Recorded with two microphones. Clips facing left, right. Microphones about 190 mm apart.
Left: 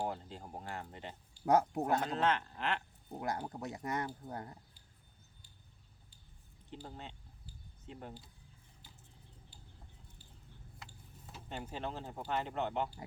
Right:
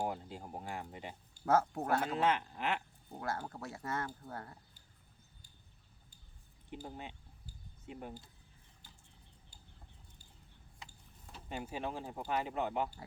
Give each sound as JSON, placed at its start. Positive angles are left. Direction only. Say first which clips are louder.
{"t": 0.0, "sound": "speech", "louder": "right 1 dB", "side_deg": -10}
{"t": 1.5, "sound": "speech", "louder": "left 1 dB", "side_deg": 15}
{"t": 2.0, "sound": "speech", "louder": "right 1 dB", "side_deg": -10}
{"t": 3.2, "sound": "speech", "louder": "left 1 dB", "side_deg": 20}
{"t": 6.8, "sound": "speech", "louder": "right 2 dB", "side_deg": -10}
{"t": 11.4, "sound": "speech", "louder": "right 1 dB", "side_deg": -10}